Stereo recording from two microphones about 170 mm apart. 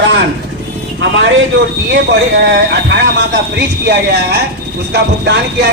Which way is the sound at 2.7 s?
90° right.